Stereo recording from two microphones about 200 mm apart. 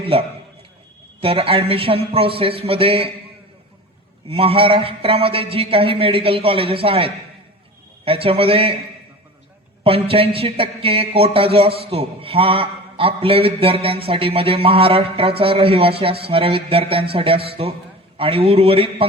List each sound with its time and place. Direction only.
0.0 s speech: 30° right (ahead or behind)
4.3 s speech: 30° right (ahead or behind)
9.8 s speech: 30° right (ahead or behind)